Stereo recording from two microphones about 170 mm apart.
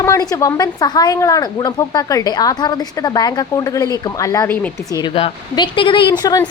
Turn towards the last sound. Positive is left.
turn(degrees=25)  # may be behind; listen again after turning